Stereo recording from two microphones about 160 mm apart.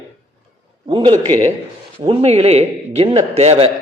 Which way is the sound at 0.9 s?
35° right (ahead or behind).